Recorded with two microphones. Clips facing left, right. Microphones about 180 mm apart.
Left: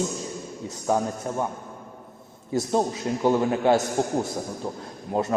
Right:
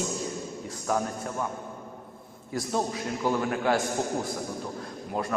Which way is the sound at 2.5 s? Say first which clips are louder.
Left 5 dB; 25° left (ahead or behind).